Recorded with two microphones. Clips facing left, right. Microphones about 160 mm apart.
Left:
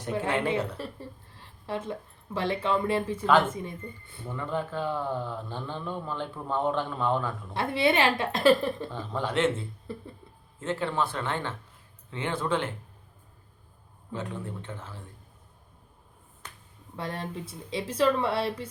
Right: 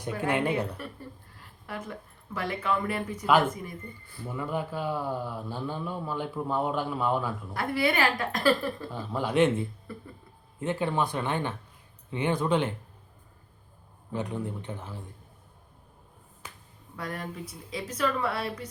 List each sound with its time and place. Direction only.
0.1 s a woman's voice: 25° left (ahead or behind)
4.3 s speech: 10° right (ahead or behind)
7.5 s speech: 25° left (ahead or behind)
8.9 s speech: 10° right (ahead or behind)
9.9 s speech: 25° left (ahead or behind)
10.6 s speech: 15° right (ahead or behind)
14.1 s speech: 15° right (ahead or behind)
17.0 s speech: 30° left (ahead or behind)